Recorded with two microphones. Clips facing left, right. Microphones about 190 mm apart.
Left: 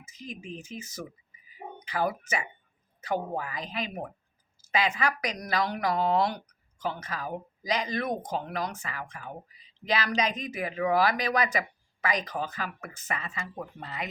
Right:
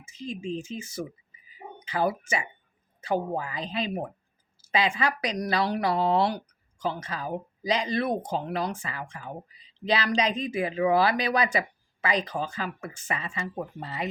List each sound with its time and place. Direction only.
0.0 s speech: 30° right (ahead or behind)